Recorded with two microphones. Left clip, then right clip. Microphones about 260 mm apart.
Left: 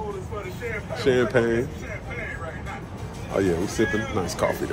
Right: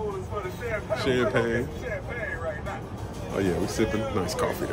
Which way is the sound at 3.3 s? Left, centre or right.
Centre.